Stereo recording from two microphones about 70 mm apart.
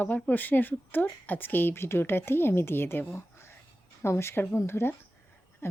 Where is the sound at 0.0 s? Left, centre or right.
Left.